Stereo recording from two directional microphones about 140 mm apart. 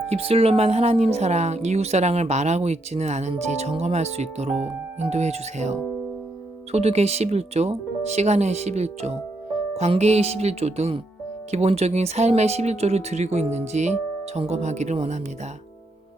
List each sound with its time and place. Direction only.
0.1 s speech: 45° right (ahead or behind)